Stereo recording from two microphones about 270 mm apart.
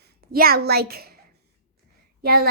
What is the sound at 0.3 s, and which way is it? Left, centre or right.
Speech, right.